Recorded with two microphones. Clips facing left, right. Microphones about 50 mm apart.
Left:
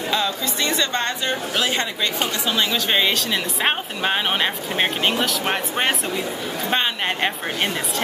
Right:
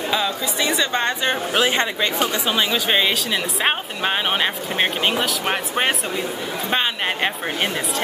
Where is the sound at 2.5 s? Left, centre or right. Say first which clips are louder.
Even; centre.